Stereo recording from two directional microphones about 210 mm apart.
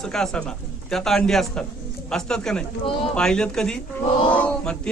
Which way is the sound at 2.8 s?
25° left (ahead or behind).